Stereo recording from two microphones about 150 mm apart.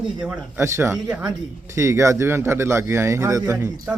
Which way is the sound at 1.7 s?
20° right (ahead or behind).